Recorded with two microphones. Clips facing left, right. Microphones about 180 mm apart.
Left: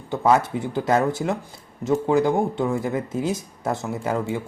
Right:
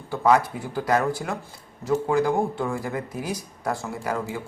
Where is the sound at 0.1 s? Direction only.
20° left (ahead or behind).